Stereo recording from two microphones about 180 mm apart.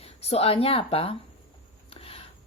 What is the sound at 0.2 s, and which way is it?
Speech, 35° left (ahead or behind).